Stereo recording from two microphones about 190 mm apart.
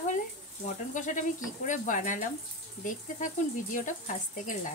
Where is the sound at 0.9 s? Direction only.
40° left (ahead or behind).